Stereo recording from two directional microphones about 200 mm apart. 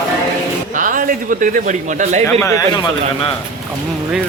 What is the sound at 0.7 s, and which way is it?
A man's voice, 40° right (ahead or behind).